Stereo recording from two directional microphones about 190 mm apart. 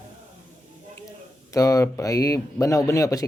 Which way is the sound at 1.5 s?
15° left (ahead or behind).